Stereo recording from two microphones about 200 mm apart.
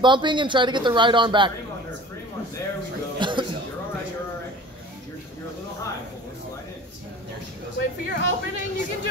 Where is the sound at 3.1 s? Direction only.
25° right (ahead or behind).